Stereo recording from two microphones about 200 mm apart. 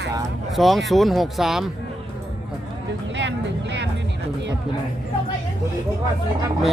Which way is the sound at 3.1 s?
60° right (ahead or behind).